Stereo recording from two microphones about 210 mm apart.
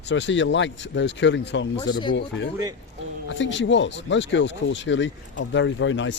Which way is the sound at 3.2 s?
60° left (ahead or behind).